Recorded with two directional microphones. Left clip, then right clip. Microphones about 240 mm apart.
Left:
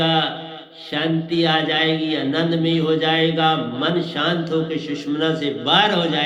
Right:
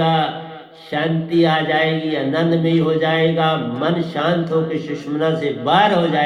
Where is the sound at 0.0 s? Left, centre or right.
Left.